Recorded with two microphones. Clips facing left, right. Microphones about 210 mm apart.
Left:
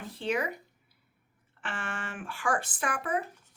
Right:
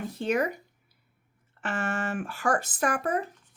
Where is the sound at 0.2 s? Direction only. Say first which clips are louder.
Right 4 dB; 45° right (ahead or behind).